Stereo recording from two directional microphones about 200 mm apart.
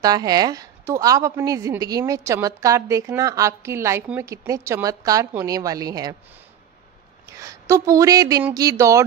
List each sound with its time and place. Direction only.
0.0 s a woman's voice: 20° right (ahead or behind)
7.3 s a woman's voice: 15° right (ahead or behind)